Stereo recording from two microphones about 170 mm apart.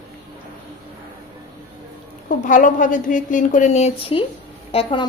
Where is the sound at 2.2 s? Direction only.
50° left (ahead or behind); by 5.1 s 30° left (ahead or behind).